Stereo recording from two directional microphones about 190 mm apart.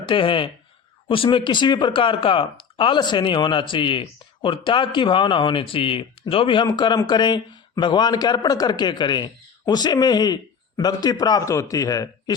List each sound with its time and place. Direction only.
0.1 s speech: 25° left (ahead or behind)